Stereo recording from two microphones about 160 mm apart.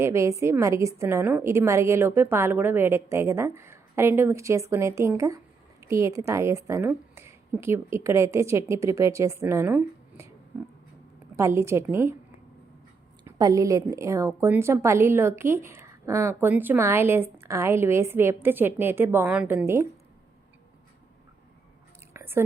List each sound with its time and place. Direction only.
0.0 s a woman's voice: 15° right (ahead or behind)
11.3 s a woman's voice: 15° right (ahead or behind)
13.2 s a woman's voice: 20° right (ahead or behind)
22.1 s whispering: 15° right (ahead or behind)